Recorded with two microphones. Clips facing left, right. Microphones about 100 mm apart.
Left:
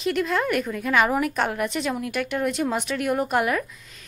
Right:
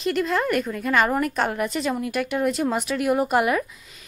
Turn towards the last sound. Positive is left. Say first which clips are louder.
# right 2 dB
turn(degrees=-5)  # may be behind; listen again after turning